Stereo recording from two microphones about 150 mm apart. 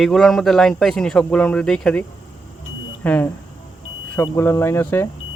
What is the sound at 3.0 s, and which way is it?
Speech, 10° left (ahead or behind).